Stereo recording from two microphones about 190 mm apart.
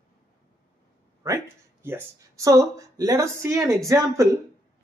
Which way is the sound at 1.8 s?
15° right (ahead or behind).